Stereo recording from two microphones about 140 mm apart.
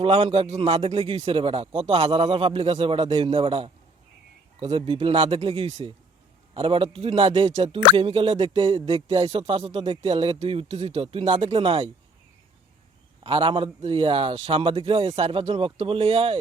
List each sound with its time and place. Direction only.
0.0 s a man's voice: 40° right (ahead or behind)
13.2 s a man's voice: 40° right (ahead or behind)